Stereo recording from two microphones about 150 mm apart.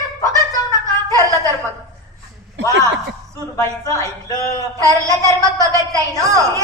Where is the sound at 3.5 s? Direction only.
20° left (ahead or behind).